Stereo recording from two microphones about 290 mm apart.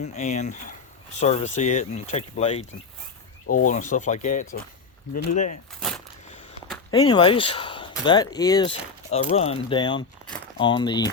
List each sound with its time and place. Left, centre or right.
0.0 s speech: left
3.4 s speech: left
3.7 s speech: left
6.9 s speech: centre